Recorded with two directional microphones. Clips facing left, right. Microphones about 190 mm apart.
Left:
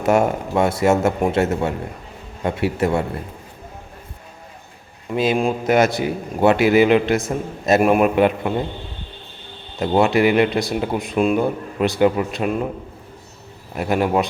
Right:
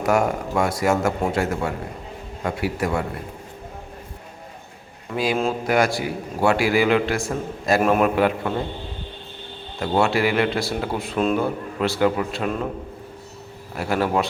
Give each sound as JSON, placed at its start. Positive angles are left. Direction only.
{"t": 0.0, "sound": "a man's voice", "side_deg": 25}
{"t": 5.1, "sound": "a man's voice", "side_deg": 20}
{"t": 9.8, "sound": "a man's voice", "side_deg": 20}
{"t": 13.7, "sound": "a man's voice", "side_deg": 20}